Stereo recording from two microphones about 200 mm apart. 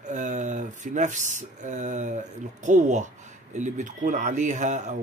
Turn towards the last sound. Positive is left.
turn(degrees=-35)  # may be behind; listen again after turning